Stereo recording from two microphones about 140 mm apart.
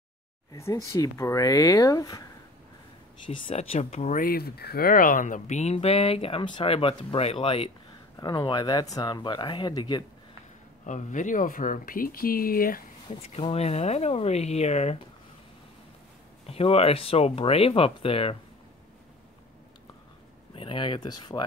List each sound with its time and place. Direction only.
0.5 s speech: 20° left (ahead or behind)
3.3 s speech: 40° left (ahead or behind)
4.2 s speech: 90° left; by 7.7 s 40° left (ahead or behind)
8.2 s speech: 30° left (ahead or behind)
10.9 s speech: 60° left (ahead or behind); by 12.8 s 90° left
13.1 s speech: 45° left (ahead or behind)
16.4 s speech: 45° left (ahead or behind)
20.5 s speech: 40° left (ahead or behind)